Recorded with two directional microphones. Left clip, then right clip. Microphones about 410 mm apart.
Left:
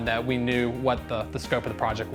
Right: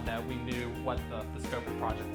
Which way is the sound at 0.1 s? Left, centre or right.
Left.